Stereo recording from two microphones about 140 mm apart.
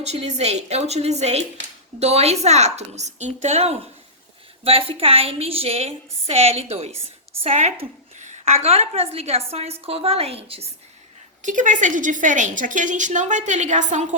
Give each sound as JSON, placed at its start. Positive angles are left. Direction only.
{"t": 0.0, "sound": "a woman's voice", "side_deg": -50}
{"t": 11.4, "sound": "a woman's voice", "side_deg": -65}